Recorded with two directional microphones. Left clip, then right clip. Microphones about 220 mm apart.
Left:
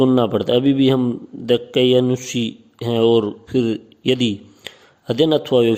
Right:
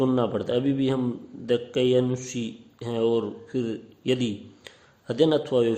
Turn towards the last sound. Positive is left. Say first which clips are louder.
# left 6 dB
turn(degrees=35)  # may be behind; listen again after turning